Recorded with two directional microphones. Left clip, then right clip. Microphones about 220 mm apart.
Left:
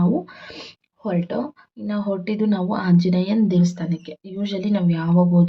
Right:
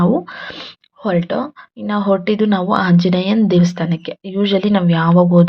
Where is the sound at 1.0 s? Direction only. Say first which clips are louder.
Right 7 dB; 15° right (ahead or behind).